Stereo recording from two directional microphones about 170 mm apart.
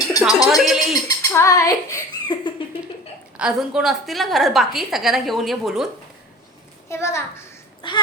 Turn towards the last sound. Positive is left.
turn(degrees=30)  # may be behind; listen again after turning